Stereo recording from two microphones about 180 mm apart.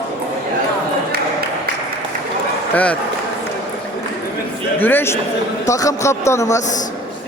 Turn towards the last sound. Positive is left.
turn(degrees=15)  # may be behind; listen again after turning